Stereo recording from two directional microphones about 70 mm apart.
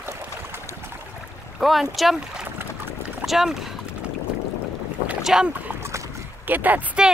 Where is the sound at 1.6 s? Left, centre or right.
Centre.